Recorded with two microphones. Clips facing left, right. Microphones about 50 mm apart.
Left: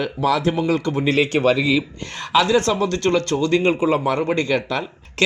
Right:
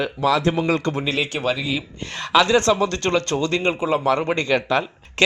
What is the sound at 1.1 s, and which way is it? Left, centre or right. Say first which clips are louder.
Speech: left 9 dB; left.